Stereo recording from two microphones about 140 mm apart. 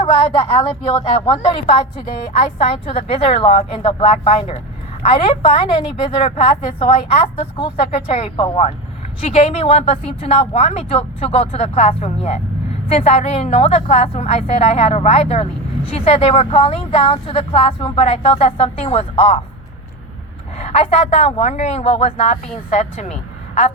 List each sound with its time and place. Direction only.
0.0 s a woman's voice: 40° left (ahead or behind)
20.6 s a woman's voice: 45° left (ahead or behind)